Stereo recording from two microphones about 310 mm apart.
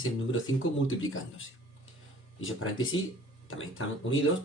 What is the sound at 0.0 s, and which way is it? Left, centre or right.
Speech, left.